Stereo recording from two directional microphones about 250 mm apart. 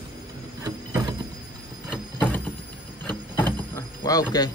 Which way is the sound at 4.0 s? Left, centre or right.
Centre.